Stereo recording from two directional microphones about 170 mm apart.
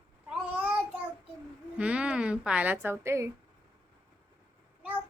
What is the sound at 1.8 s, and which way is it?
A woman's voice, 5° right (ahead or behind).